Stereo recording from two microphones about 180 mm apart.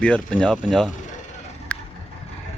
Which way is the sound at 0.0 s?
5° left (ahead or behind).